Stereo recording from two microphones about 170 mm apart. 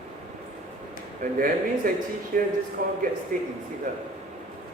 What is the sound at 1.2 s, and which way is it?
A man's voice, 50° right (ahead or behind).